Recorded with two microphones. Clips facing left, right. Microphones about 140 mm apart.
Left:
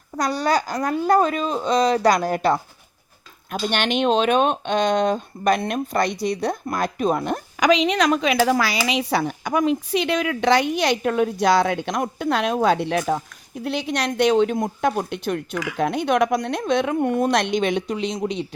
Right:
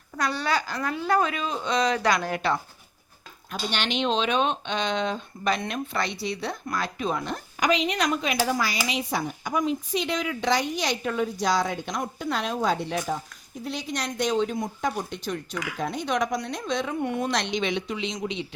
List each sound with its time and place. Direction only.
0.2 s a woman's voice: 40° left (ahead or behind)
3.5 s speech: 55° left (ahead or behind)
7.6 s speech: 90° left; by 18.4 s 40° left (ahead or behind)